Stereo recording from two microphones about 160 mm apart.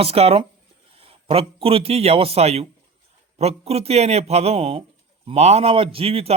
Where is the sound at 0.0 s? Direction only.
40° right (ahead or behind).